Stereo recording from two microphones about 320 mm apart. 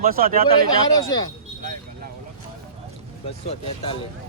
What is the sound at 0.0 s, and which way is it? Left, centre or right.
Speech, right.